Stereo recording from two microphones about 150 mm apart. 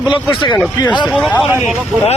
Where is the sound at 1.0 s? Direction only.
5° left (ahead or behind).